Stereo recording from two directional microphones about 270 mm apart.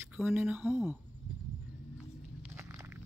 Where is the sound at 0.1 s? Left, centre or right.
Centre.